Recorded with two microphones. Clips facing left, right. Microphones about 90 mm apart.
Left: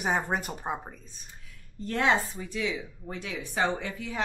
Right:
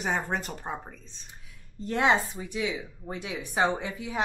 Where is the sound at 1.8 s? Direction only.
20° right (ahead or behind).